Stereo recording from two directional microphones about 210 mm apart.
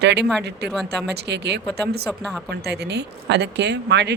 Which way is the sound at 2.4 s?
50° right (ahead or behind).